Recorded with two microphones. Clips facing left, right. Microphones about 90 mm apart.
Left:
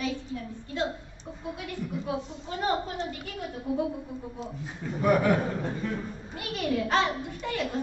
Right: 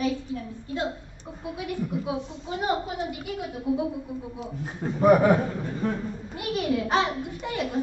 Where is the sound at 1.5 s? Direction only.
15° right (ahead or behind).